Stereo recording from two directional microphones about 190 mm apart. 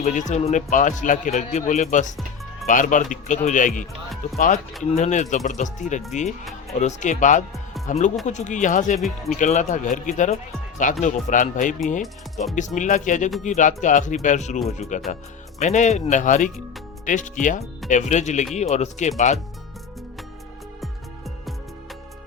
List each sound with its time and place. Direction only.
0.0 s a man's voice: 40° left (ahead or behind)